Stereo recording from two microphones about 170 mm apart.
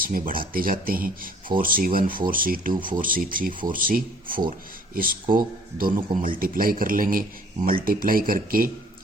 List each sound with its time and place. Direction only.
0.0 s speech: 55° right (ahead or behind)
5.4 s speech: 55° right (ahead or behind)